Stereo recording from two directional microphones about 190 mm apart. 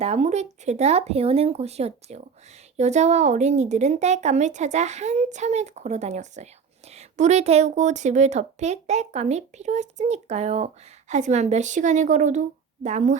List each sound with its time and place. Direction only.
0.0 s a woman's voice: 35° right (ahead or behind)